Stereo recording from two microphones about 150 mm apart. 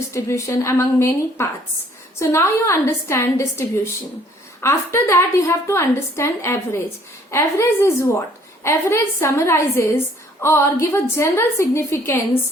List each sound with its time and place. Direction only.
0.1 s a woman's voice: 20° left (ahead or behind)